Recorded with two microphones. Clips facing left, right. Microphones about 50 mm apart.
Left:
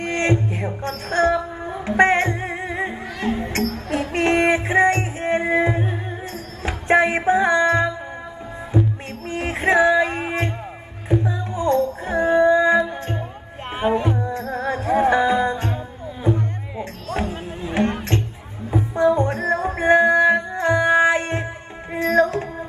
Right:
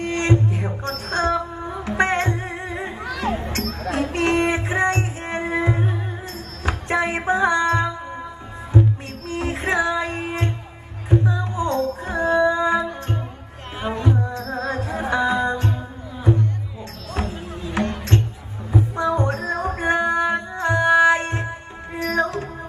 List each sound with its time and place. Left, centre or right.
0.0 s music: left
4.1 s music: left
6.9 s music: left
9.3 s music: left
16.2 s music: left
17.1 s music: left